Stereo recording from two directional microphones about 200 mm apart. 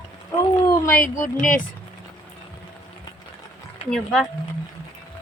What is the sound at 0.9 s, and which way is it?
Speech, 40° left (ahead or behind).